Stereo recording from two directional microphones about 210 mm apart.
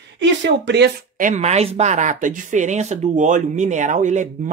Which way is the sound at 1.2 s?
35° right (ahead or behind).